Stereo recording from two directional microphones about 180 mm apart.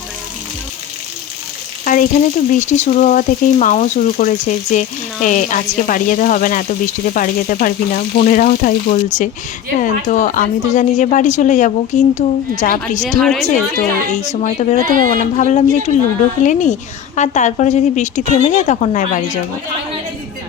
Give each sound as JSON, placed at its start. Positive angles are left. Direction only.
{"t": 1.8, "sound": "speech", "side_deg": 50}
{"t": 13.1, "sound": "a woman's voice", "side_deg": 0}
{"t": 14.1, "sound": "a woman's voice", "side_deg": 40}
{"t": 14.8, "sound": "speech", "side_deg": -50}
{"t": 15.4, "sound": "a woman's voice", "side_deg": 40}